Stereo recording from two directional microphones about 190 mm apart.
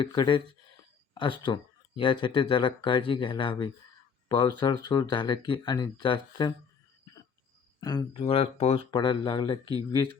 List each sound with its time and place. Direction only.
0.0 s speech: 25° left (ahead or behind)
1.1 s a sound: 25° left (ahead or behind)
2.0 s speech: 25° left (ahead or behind)
7.8 s speech: 20° left (ahead or behind)